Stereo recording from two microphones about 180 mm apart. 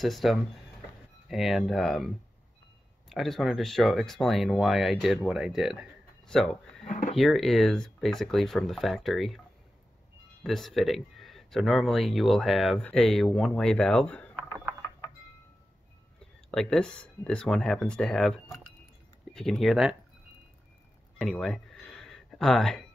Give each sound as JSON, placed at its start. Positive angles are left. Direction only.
{"t": 0.0, "sound": "speech", "side_deg": 0}
{"t": 6.9, "sound": "a sound", "side_deg": 45}
{"t": 7.2, "sound": "speech", "side_deg": 0}
{"t": 10.4, "sound": "speech", "side_deg": 0}
{"t": 16.2, "sound": "speech", "side_deg": 5}
{"t": 19.3, "sound": "speech", "side_deg": 0}
{"t": 21.2, "sound": "a sound", "side_deg": 0}